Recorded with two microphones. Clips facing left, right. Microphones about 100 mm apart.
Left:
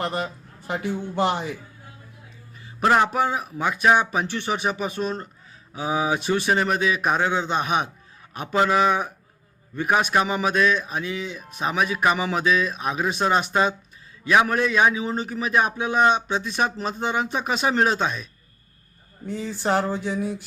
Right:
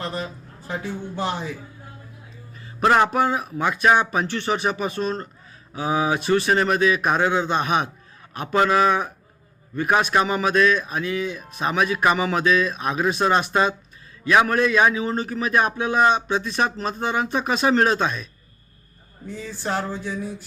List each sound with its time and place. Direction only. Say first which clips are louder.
0.0 s a man's voice: left 2 dB; 65° left (ahead or behind)
2.8 s speech: right 2 dB; 5° left (ahead or behind)
7.2 s a man's voice: right 2 dB; 10° right (ahead or behind)
7.5 s speech: right 2 dB; 10° left (ahead or behind)
14.3 s speech: right 2 dB; 10° left (ahead or behind)
19.4 s speech: left 4 dB; 15° left (ahead or behind)